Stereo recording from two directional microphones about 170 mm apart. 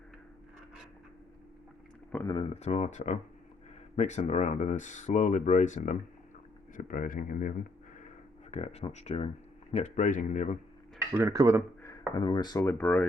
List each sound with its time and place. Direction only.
2.2 s speech: 30° left (ahead or behind); by 7.5 s 50° left (ahead or behind)
8.4 s speech: 40° left (ahead or behind)
11.1 s speech: 20° right (ahead or behind)
11.8 s speech: 20° left (ahead or behind)